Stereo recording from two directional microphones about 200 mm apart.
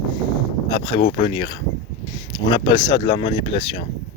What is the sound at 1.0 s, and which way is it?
Speech, 25° left (ahead or behind).